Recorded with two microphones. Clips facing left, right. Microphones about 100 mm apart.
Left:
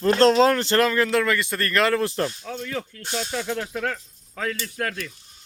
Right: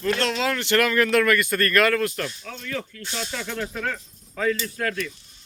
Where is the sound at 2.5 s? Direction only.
15° left (ahead or behind).